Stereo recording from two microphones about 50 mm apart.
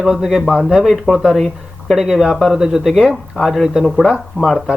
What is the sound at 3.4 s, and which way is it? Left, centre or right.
Speech, centre.